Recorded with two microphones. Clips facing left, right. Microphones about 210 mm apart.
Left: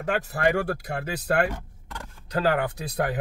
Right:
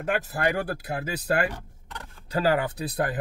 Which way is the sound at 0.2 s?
Centre (ahead or behind).